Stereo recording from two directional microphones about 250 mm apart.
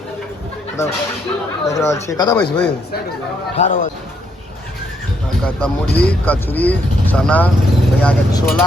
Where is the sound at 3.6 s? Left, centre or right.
Left.